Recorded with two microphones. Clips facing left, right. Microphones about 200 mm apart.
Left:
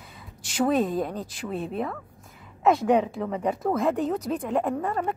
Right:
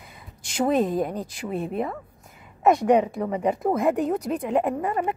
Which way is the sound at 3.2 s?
10° right (ahead or behind).